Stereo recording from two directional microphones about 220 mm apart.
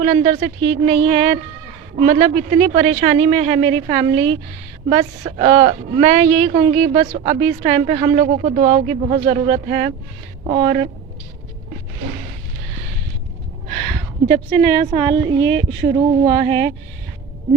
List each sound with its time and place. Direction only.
0.0 s speech: 30° right (ahead or behind)
13.7 s speech: 35° right (ahead or behind)